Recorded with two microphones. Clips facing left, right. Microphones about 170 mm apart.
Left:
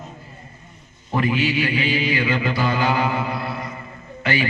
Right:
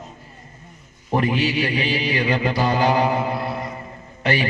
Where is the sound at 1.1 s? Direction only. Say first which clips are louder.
Even; 35° right (ahead or behind).